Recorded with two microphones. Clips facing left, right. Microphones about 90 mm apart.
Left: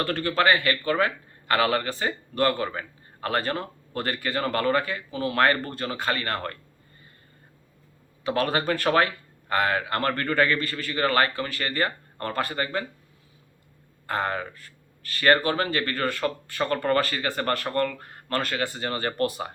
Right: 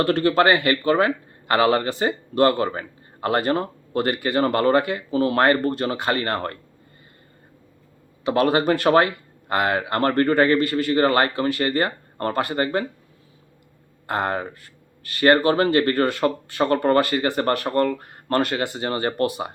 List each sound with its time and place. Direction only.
0.0 s speech: 25° right (ahead or behind)
8.3 s speech: 20° right (ahead or behind)
14.1 s speech: 30° right (ahead or behind)